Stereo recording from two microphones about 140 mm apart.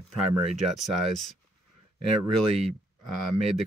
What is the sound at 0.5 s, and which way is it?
Speech, centre (ahead or behind).